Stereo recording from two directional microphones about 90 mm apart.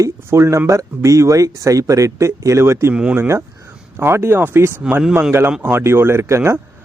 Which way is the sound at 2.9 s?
15° right (ahead or behind).